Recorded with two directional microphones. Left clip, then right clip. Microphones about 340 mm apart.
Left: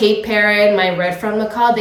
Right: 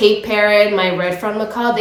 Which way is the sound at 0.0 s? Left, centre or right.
Centre.